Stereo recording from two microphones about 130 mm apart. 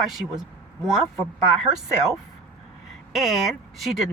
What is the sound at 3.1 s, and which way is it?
Speech, centre (ahead or behind).